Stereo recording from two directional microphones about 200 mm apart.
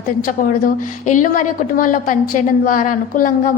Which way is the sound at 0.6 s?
40° left (ahead or behind).